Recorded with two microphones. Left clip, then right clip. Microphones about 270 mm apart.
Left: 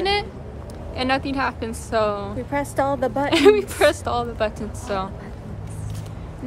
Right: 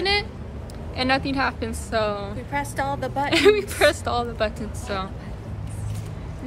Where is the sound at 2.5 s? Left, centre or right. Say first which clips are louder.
Left 4 dB; left.